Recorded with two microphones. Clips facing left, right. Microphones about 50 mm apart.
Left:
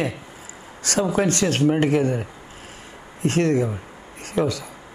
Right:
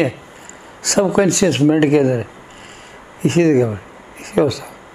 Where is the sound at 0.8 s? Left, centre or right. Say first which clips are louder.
Right 6 dB; right.